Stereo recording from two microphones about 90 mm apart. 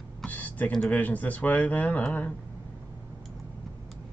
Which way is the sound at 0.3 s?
20° left (ahead or behind).